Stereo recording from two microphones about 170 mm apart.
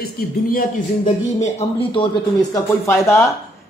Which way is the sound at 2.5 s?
15° left (ahead or behind).